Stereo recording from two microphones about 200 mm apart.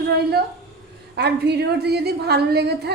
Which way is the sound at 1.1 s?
55° right (ahead or behind).